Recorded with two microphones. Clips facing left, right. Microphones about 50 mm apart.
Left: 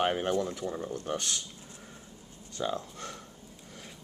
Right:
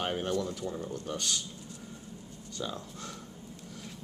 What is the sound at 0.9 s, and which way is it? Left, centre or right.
Speech, left.